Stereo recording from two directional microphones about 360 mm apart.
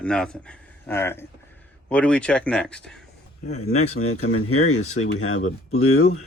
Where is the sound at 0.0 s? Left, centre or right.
Centre.